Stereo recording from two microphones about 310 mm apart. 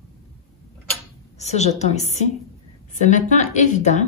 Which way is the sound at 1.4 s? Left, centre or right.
Left.